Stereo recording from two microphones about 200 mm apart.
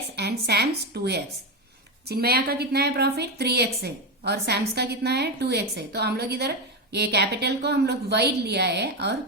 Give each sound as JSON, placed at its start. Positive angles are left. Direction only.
{"t": 0.2, "sound": "a woman's voice", "side_deg": -55}